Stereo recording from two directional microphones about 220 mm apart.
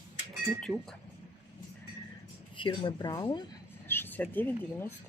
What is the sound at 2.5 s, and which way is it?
Speech, 20° left (ahead or behind).